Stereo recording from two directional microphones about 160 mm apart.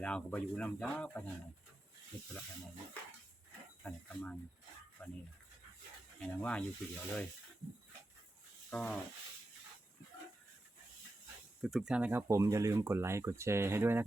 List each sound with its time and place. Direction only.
0.0 s speech: 5° left (ahead or behind)
3.8 s speech: 10° left (ahead or behind)
6.1 s speech: 5° left (ahead or behind)
8.7 s rub: 5° left (ahead or behind)
11.6 s speech: centre (ahead or behind)
12.3 s speech: 20° right (ahead or behind)